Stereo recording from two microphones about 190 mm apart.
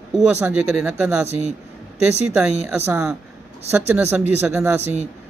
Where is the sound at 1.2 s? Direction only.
35° right (ahead or behind).